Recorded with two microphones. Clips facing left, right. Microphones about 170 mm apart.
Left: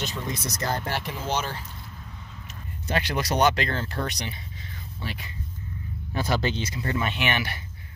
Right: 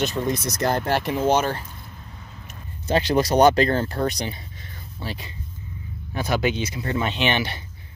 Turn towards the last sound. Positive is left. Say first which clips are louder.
# right 4 dB
turn(degrees=-25)  # may be behind; listen again after turning